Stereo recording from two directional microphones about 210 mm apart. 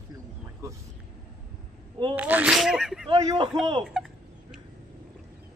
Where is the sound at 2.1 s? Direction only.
5° right (ahead or behind).